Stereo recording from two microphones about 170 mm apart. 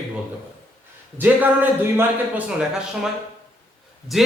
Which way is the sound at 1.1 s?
10° right (ahead or behind).